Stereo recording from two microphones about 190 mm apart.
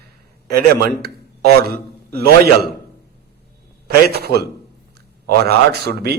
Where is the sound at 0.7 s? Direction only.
55° right (ahead or behind).